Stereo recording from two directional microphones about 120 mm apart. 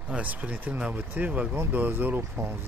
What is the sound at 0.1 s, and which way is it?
Speech, 15° right (ahead or behind).